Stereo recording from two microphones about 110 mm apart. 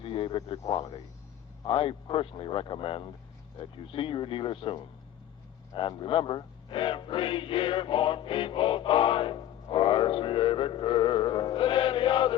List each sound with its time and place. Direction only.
0.0 s speech: 50° left (ahead or behind)
0.7 s speech: 40° left (ahead or behind)
1.6 s speech: 50° left (ahead or behind)